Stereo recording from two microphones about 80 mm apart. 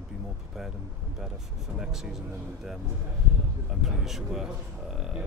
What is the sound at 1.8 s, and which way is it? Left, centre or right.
Speech, centre.